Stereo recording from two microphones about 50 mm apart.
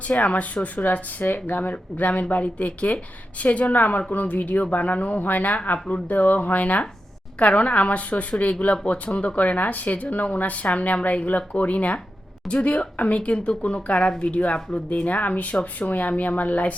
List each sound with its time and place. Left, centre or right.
0.1 s a woman's voice: left